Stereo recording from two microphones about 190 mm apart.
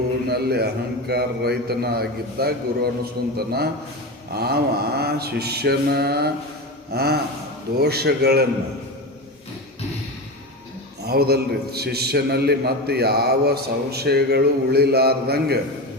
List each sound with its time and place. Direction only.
0.3 s a man's voice: 55° right (ahead or behind)
11.0 s a man's voice: 55° right (ahead or behind)